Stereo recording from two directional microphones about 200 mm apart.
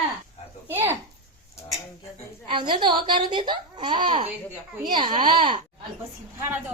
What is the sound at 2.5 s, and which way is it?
A child's voice, 25° right (ahead or behind).